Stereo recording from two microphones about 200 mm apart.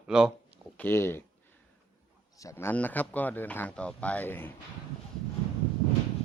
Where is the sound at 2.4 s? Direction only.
15° left (ahead or behind).